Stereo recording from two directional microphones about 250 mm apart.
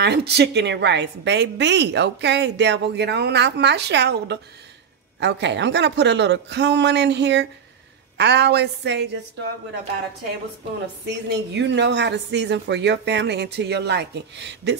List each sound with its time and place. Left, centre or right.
0.0 s a woman's voice: right
11.1 s a woman's voice: right